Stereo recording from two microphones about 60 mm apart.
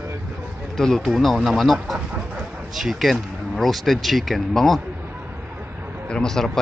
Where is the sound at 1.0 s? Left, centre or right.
Centre.